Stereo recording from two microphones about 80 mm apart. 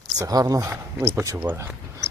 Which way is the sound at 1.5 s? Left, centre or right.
Right.